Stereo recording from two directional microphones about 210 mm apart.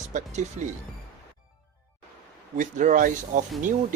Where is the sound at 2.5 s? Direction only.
40° right (ahead or behind).